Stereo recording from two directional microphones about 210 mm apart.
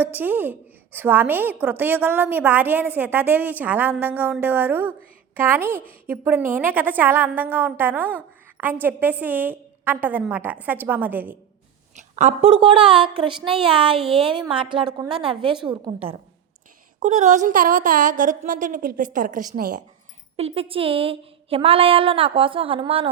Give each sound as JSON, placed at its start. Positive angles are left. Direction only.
{"t": 0.0, "sound": "a woman's voice", "side_deg": -10}
{"t": 11.9, "sound": "speech", "side_deg": -35}
{"t": 14.0, "sound": "speech", "side_deg": 0}
{"t": 14.3, "sound": "speech", "side_deg": -25}
{"t": 20.3, "sound": "speech", "side_deg": -30}